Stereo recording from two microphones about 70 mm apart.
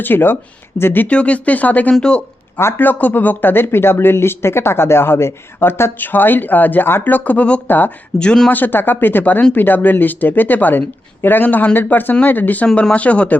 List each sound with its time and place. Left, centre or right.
0.0 s speech: left
1.0 s speech: centre
2.6 s speech: left; by 8.4 s centre
8.4 s speech: left
12.6 s speech: centre